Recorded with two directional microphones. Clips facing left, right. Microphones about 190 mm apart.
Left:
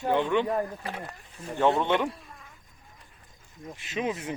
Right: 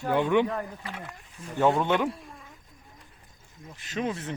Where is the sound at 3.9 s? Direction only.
10° left (ahead or behind).